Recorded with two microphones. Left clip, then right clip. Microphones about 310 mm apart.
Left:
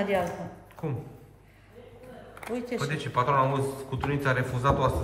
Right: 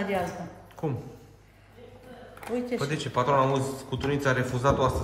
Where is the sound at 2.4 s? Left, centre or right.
Centre.